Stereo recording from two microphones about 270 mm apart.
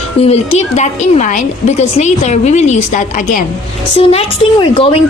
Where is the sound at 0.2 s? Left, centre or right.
Left.